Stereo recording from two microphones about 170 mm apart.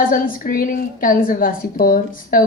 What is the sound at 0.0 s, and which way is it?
A woman's voice, 55° left (ahead or behind).